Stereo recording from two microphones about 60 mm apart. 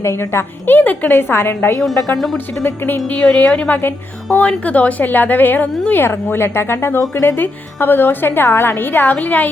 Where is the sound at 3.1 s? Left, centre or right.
Left.